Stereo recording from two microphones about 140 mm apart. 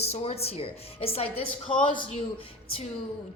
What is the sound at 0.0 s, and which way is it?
A woman's voice, 45° left (ahead or behind).